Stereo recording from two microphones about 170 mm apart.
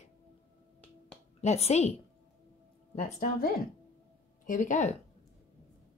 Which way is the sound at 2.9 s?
40° left (ahead or behind).